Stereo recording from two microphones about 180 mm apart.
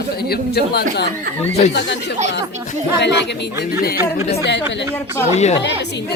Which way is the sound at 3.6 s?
55° left (ahead or behind).